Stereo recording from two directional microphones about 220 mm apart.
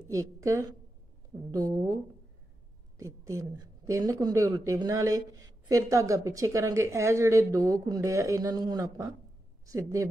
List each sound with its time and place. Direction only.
0.1 s a woman's voice: 15° right (ahead or behind)
3.0 s a woman's voice: 15° right (ahead or behind)